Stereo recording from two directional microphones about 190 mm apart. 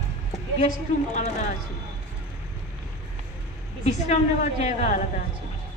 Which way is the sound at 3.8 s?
40° left (ahead or behind).